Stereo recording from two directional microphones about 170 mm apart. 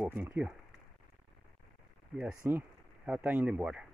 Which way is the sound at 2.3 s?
15° right (ahead or behind).